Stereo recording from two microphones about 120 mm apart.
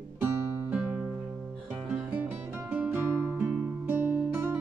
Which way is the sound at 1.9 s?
15° right (ahead or behind).